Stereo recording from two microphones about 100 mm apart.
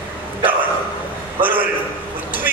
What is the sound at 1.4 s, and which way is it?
Speech, 20° right (ahead or behind).